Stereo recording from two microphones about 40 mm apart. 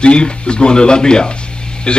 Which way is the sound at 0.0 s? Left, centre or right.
Left.